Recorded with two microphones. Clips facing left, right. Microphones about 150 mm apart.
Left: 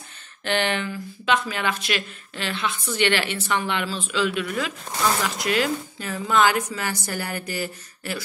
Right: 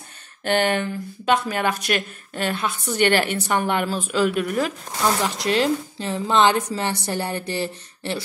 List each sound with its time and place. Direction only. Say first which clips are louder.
0.4 s speech: right 4 dB; 50° right (ahead or behind)
5.2 s a woman's voice: right 3 dB; 30° right (ahead or behind)